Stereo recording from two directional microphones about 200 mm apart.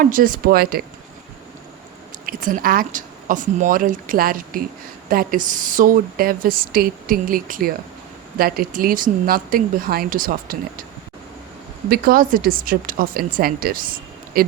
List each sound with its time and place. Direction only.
0.0 s a woman's voice: 45° right (ahead or behind)
2.2 s a woman's voice: 45° right (ahead or behind)
11.9 s a woman's voice: 45° right (ahead or behind)